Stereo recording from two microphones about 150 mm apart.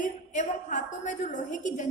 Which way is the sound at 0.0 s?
55° left (ahead or behind).